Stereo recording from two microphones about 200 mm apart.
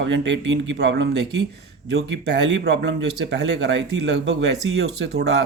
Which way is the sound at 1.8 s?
70° right (ahead or behind).